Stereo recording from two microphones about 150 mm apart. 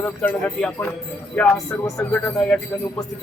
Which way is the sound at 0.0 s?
10° left (ahead or behind).